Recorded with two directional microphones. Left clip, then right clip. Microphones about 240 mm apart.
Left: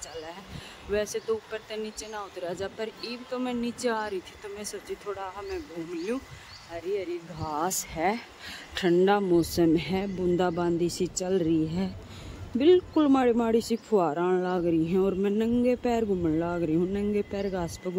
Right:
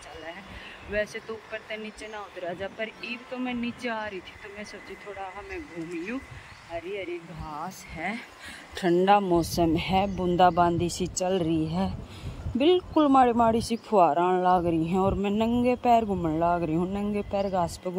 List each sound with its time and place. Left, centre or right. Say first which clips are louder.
0.9 s speech: left 2 dB; centre
6.7 s speech: left 2 dB; centre
7.4 s speech: left 9 dB; left
8.7 s speech: right 2 dB; centre